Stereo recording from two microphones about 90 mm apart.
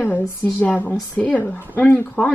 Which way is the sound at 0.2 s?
25° left (ahead or behind).